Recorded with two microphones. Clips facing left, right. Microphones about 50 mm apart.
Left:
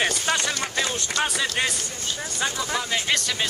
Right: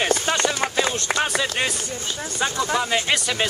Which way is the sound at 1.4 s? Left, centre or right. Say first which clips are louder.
Right 1 dB; centre.